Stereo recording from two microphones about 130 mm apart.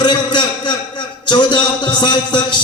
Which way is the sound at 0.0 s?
35° left (ahead or behind).